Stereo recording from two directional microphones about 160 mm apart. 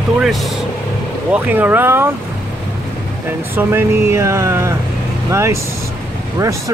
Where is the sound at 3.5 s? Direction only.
15° right (ahead or behind).